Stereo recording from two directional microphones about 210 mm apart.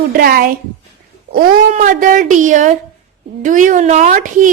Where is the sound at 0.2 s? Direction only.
45° right (ahead or behind).